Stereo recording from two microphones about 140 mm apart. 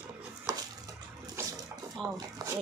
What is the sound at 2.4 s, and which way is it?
Speech, 30° right (ahead or behind).